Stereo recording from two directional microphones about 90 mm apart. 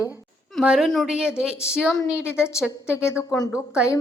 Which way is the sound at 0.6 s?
5° right (ahead or behind).